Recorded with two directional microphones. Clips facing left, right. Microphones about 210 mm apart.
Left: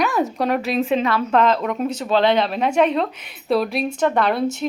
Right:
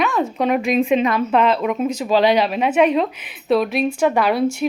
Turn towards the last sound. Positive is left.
turn(degrees=-5)  # may be behind; listen again after turning